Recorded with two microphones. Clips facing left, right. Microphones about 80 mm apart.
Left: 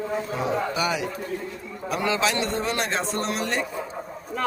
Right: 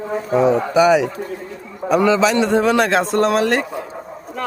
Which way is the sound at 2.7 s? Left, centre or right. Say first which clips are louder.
Right 10 dB; right.